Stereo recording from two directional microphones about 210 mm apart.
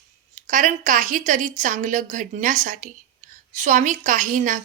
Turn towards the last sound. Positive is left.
turn(degrees=-40)  # may be behind; listen again after turning